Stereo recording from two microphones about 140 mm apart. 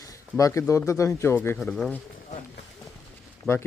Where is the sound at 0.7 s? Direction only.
20° left (ahead or behind).